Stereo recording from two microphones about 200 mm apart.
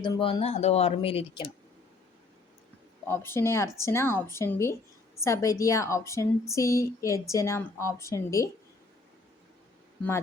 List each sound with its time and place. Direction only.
0.0 s speech: 25° left (ahead or behind)
3.1 s a woman's voice: 10° left (ahead or behind)